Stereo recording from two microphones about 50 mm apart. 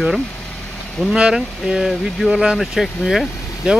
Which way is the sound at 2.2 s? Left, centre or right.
Right.